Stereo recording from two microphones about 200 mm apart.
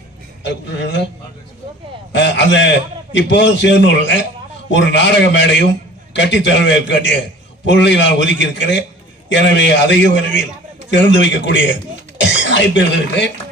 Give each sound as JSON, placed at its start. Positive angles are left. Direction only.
{"t": 0.4, "sound": "a man's voice", "side_deg": 60}
{"t": 2.1, "sound": "a man's voice", "side_deg": 65}